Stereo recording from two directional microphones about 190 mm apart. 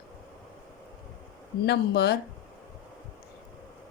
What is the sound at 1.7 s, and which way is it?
Speech, 55° left (ahead or behind).